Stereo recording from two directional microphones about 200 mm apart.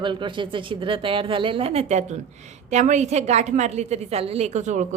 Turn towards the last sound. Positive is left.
turn(degrees=-35)  # may be behind; listen again after turning